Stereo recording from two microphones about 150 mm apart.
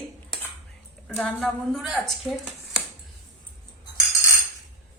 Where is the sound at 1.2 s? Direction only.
5° left (ahead or behind).